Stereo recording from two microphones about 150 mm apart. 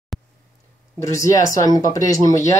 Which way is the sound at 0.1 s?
Centre (ahead or behind).